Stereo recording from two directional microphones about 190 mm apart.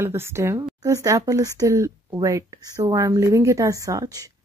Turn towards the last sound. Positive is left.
turn(degrees=-20)  # may be behind; listen again after turning